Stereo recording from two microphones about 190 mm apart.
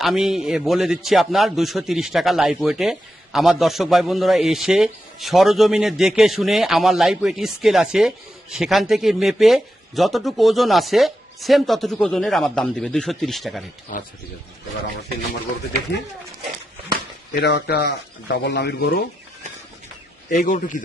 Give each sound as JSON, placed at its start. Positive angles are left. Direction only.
{"t": 0.0, "sound": "a man's voice", "side_deg": 0}
{"t": 17.4, "sound": "speech", "side_deg": 60}
{"t": 20.3, "sound": "speech", "side_deg": 45}